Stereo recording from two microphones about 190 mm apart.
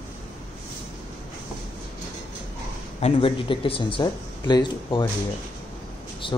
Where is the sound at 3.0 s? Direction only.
30° left (ahead or behind).